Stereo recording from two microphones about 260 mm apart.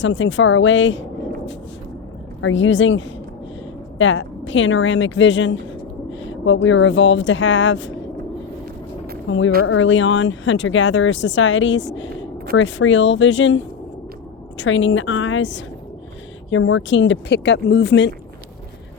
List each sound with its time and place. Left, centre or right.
0.0 s speech: left
2.4 s speech: left
9.3 s speech: left
14.6 s speech: left